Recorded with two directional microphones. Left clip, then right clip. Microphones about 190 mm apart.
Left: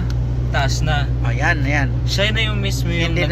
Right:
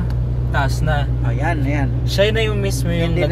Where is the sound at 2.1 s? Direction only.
55° right (ahead or behind).